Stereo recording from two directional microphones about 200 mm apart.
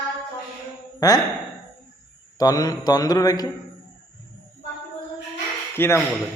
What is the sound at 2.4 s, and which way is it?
Mantra, 20° left (ahead or behind).